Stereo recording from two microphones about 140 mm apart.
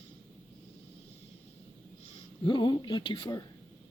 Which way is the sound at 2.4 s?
35° left (ahead or behind).